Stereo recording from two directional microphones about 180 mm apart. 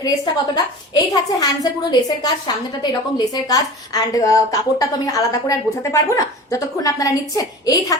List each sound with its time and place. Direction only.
0.0 s a woman's voice: 20° left (ahead or behind)